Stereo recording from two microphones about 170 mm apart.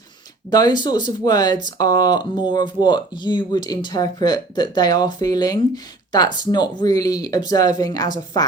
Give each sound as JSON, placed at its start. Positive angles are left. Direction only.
{"t": 0.5, "sound": "speech", "side_deg": 25}